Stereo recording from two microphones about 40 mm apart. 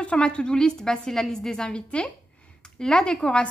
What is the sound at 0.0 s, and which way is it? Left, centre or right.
A woman's voice, left.